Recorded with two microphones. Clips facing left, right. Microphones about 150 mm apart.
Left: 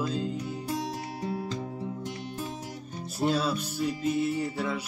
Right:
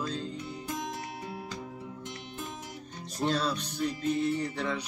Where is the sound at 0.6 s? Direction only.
35° left (ahead or behind).